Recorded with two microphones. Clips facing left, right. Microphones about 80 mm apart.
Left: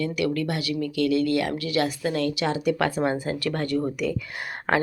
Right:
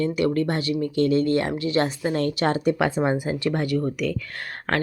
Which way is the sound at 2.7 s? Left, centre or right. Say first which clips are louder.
Right 2 dB; centre.